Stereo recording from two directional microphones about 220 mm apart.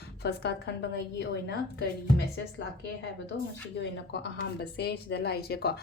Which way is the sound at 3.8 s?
45° left (ahead or behind).